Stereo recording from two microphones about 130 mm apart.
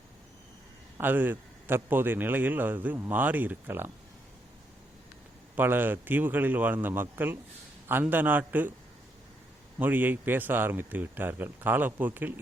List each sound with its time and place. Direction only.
0.9 s a man's voice: 15° right (ahead or behind)
5.5 s a man's voice: 15° right (ahead or behind)
9.7 s a man's voice: 15° right (ahead or behind)